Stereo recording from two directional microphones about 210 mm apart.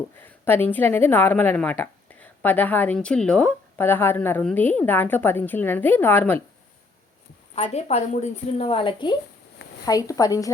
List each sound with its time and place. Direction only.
0.2 s a woman's voice: 10° left (ahead or behind)
7.5 s a woman's voice: 30° left (ahead or behind)